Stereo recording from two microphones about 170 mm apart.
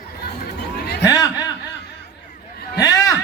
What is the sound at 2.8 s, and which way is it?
Speech, 20° left (ahead or behind).